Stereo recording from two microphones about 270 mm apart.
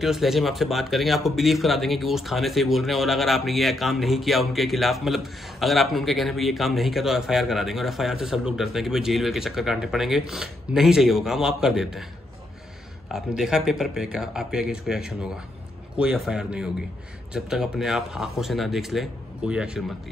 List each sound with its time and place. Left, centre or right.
0.0 s speech: centre
13.1 s speech: centre